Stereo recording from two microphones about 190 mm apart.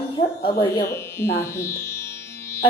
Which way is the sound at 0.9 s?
15° left (ahead or behind).